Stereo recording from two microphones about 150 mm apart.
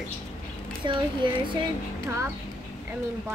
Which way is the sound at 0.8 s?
30° right (ahead or behind).